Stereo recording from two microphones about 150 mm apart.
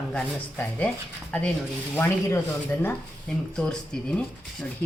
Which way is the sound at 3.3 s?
5° left (ahead or behind).